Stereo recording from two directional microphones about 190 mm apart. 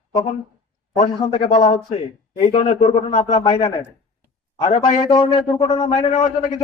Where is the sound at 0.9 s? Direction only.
35° left (ahead or behind).